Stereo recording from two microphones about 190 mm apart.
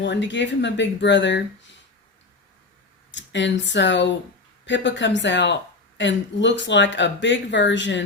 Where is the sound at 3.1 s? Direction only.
75° left (ahead or behind).